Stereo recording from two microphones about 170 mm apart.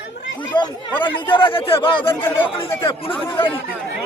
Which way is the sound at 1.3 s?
30° left (ahead or behind).